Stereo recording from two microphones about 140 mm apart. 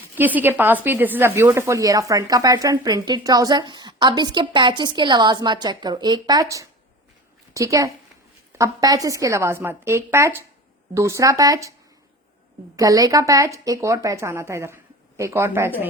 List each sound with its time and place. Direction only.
0.2 s a woman's voice: 15° right (ahead or behind)
12.7 s a woman's voice: 25° right (ahead or behind)